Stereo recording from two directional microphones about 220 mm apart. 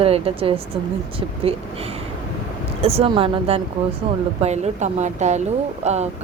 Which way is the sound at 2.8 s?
25° right (ahead or behind).